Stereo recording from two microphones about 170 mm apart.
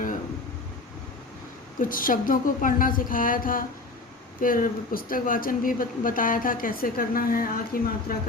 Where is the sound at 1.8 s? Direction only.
55° left (ahead or behind).